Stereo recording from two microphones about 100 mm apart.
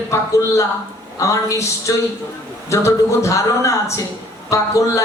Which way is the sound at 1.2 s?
30° left (ahead or behind).